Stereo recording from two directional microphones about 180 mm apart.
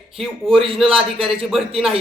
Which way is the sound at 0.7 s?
Centre (ahead or behind).